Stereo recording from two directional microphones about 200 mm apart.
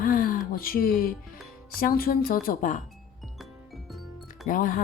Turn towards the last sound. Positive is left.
turn(degrees=40)  # may be behind; listen again after turning